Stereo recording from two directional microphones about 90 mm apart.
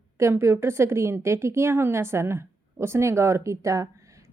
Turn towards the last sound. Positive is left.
turn(degrees=-35)  # may be behind; listen again after turning